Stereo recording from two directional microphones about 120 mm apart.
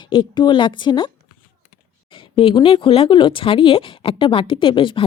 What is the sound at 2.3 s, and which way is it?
Speech, 45° left (ahead or behind).